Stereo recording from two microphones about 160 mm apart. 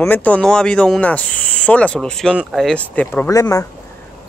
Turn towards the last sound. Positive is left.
turn(degrees=20)  # may be behind; listen again after turning